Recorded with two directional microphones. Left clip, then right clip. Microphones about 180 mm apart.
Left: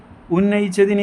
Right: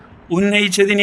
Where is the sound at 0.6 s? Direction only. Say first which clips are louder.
Right 4 dB; 45° right (ahead or behind).